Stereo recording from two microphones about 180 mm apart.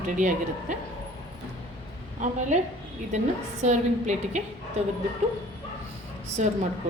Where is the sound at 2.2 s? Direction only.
45° right (ahead or behind).